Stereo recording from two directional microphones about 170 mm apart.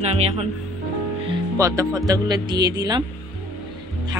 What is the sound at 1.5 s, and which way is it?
Speech, 20° right (ahead or behind).